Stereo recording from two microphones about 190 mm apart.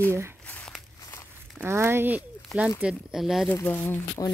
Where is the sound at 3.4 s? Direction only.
10° left (ahead or behind).